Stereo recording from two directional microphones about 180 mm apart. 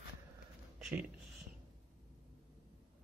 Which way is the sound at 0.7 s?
5° right (ahead or behind).